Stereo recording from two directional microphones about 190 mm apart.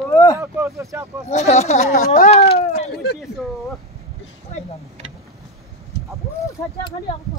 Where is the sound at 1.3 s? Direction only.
35° left (ahead or behind).